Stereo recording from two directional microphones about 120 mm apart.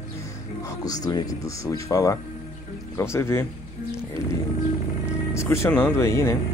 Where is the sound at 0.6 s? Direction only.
30° left (ahead or behind).